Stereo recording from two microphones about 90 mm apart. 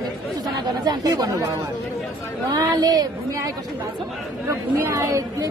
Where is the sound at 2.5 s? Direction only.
50° right (ahead or behind).